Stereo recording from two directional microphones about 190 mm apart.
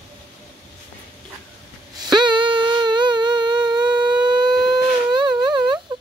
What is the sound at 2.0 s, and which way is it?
Humming, 25° right (ahead or behind).